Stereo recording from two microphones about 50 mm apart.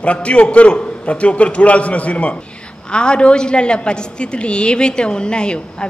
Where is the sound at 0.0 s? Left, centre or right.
Left.